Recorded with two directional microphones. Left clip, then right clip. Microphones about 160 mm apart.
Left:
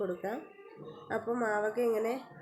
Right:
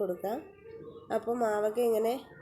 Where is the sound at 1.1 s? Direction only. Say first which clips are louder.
Right 2 dB; 20° right (ahead or behind).